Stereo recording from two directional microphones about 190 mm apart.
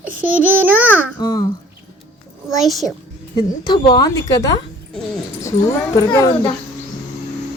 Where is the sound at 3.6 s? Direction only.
25° left (ahead or behind).